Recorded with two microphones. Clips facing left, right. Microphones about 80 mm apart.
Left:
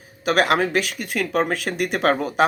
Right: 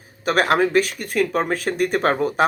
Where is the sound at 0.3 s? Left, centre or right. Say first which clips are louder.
Right 1 dB; right.